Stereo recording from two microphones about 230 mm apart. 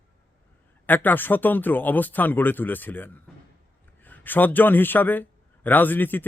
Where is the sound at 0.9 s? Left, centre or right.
Centre.